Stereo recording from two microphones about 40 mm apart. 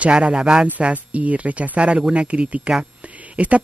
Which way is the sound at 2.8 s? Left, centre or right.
Right.